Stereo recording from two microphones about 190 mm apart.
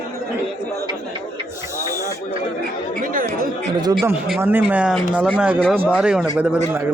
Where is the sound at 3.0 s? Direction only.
45° right (ahead or behind).